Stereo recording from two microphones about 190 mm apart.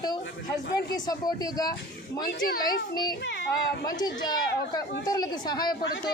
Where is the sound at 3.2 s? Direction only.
65° left (ahead or behind).